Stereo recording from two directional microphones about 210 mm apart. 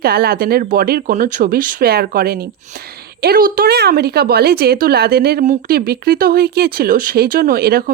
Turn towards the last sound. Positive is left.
turn(degrees=-45)  # may be behind; listen again after turning